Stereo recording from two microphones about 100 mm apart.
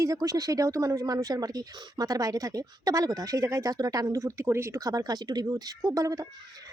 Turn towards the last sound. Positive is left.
turn(degrees=-35)  # may be behind; listen again after turning